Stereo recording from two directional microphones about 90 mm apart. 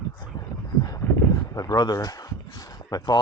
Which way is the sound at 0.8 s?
45° left (ahead or behind).